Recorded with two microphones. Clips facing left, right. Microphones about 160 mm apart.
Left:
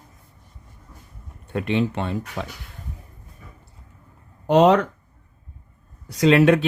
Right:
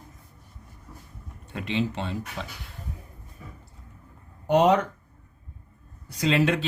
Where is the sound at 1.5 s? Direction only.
55° left (ahead or behind).